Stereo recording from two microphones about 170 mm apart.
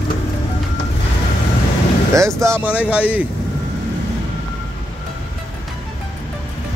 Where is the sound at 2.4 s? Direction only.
10° right (ahead or behind).